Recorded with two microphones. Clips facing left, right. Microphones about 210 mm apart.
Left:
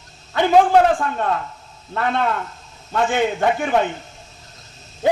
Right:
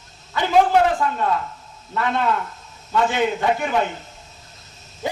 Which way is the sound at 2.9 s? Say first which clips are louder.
Left 1 dB; 50° left (ahead or behind).